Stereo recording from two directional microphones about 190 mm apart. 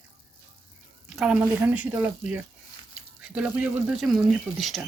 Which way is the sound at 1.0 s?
Centre (ahead or behind).